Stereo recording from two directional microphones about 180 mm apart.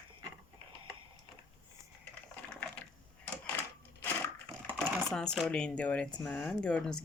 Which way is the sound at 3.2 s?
10° left (ahead or behind).